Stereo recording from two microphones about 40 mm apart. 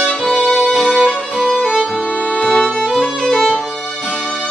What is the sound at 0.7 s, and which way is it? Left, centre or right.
Music, centre.